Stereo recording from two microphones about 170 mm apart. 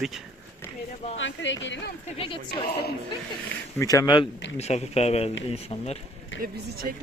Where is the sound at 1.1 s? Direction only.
90° left.